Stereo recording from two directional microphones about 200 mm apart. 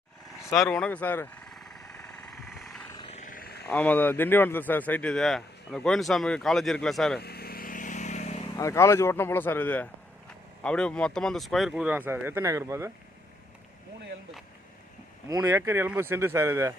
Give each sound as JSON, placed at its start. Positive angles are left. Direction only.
{"t": 0.5, "sound": "vehicle", "side_deg": 5}
{"t": 2.9, "sound": "a sound", "side_deg": 25}
{"t": 3.2, "sound": "a sound", "side_deg": 45}
{"t": 3.7, "sound": "speech", "side_deg": 5}
{"t": 7.2, "sound": "vehicle", "side_deg": 50}
{"t": 8.5, "sound": "speech", "side_deg": 15}
{"t": 15.3, "sound": "speech", "side_deg": -15}